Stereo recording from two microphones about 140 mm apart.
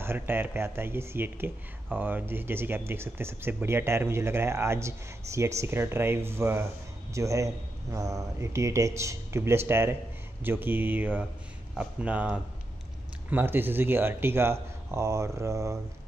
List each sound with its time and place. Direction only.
0.0 s a man's voice: 15° right (ahead or behind)